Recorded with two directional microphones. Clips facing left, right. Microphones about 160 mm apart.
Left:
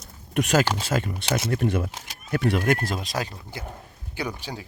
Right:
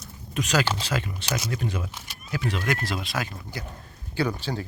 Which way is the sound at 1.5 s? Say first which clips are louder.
Left 6 dB; 55° left (ahead or behind).